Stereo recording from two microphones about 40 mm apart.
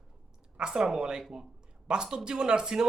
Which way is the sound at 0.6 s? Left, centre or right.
Centre.